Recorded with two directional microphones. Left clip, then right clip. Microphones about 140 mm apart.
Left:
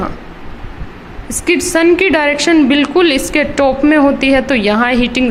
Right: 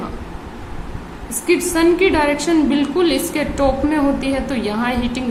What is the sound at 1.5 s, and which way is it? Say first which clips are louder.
A woman's voice: left 4 dB; 55° left (ahead or behind).